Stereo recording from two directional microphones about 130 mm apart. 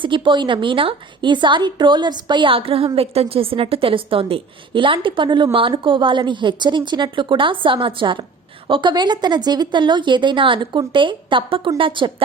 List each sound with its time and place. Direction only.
0.0 s a woman's voice: 40° right (ahead or behind)